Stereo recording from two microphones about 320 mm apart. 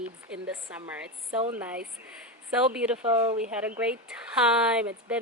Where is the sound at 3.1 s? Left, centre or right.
Centre.